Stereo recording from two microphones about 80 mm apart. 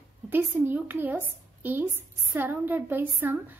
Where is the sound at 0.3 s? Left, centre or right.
Right.